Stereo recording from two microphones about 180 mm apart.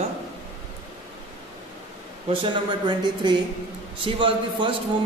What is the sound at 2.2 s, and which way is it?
A man's voice, 25° right (ahead or behind).